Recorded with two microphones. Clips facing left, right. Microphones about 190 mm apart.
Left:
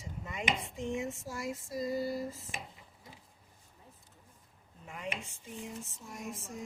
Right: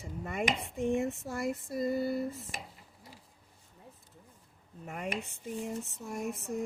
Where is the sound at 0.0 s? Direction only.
55° right (ahead or behind).